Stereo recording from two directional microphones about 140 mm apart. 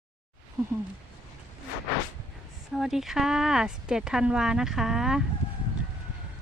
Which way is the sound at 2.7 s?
Centre (ahead or behind).